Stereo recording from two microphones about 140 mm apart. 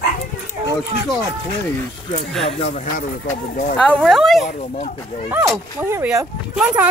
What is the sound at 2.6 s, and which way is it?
Speech, 55° left (ahead or behind).